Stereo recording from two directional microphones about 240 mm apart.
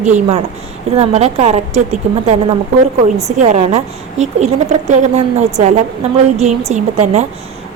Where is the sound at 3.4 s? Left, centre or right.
Right.